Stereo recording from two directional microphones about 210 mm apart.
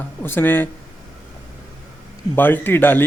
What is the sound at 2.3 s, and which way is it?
Speech, 10° left (ahead or behind).